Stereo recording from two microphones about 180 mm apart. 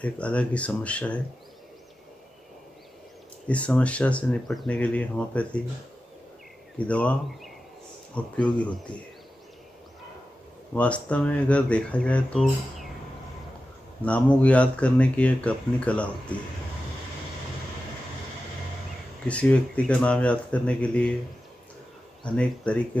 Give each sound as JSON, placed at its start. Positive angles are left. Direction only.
{"t": 0.0, "sound": "speech", "side_deg": 5}
{"t": 3.4, "sound": "speech", "side_deg": 5}
{"t": 6.9, "sound": "speech", "side_deg": 5}
{"t": 10.7, "sound": "speech", "side_deg": 5}
{"t": 14.0, "sound": "speech", "side_deg": 5}
{"t": 19.2, "sound": "speech", "side_deg": 5}
{"t": 22.3, "sound": "speech", "side_deg": 5}